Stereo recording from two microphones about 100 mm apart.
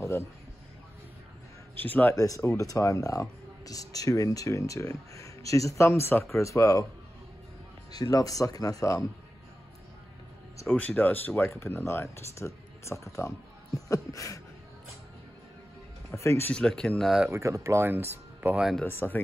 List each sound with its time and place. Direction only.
1.8 s speech: 20° left (ahead or behind)
2.1 s speech: 35° left (ahead or behind)
7.9 s speech: 40° left (ahead or behind)
10.7 s speech: 15° left (ahead or behind); by 14.4 s 35° left (ahead or behind)
16.2 s speech: 25° left (ahead or behind)
16.5 s speech: 10° left (ahead or behind)
17.3 s speech: 30° right (ahead or behind)
18.9 s speech: 20° left (ahead or behind)